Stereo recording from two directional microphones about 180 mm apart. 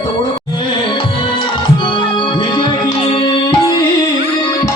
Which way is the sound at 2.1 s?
25° left (ahead or behind).